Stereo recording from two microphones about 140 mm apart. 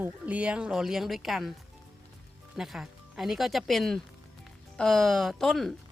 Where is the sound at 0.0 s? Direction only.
10° right (ahead or behind).